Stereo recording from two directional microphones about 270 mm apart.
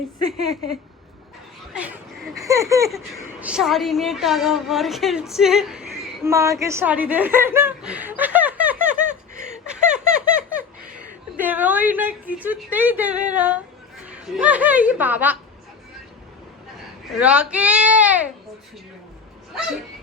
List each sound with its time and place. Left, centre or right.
0.3 s speech: right
2.5 s a woman's voice: centre
9.6 s baby laughter: centre
11.3 s a woman's voice: centre
17.1 s speech: centre